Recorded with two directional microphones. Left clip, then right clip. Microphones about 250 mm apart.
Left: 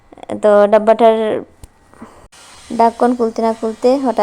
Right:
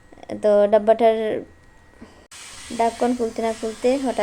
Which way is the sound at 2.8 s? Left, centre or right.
Left.